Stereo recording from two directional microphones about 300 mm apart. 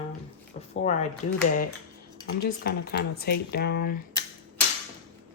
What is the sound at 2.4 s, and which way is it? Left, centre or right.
Speech, left.